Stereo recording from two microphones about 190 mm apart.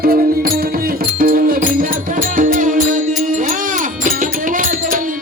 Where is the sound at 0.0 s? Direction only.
50° right (ahead or behind).